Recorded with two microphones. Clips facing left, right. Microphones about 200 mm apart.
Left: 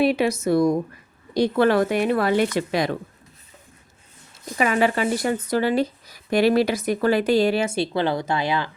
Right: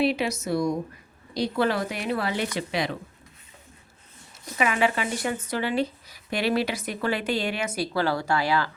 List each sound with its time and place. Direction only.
0.0 s speech: 55° left (ahead or behind)
4.5 s speech: 40° left (ahead or behind); by 8.7 s 20° left (ahead or behind)